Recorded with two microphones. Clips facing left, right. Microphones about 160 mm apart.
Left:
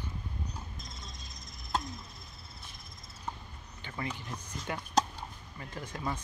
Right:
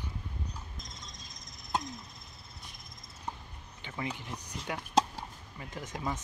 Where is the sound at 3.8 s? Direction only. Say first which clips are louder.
Right 1 dB; 15° right (ahead or behind).